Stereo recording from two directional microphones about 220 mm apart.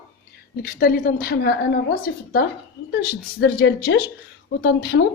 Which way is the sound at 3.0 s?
45° left (ahead or behind).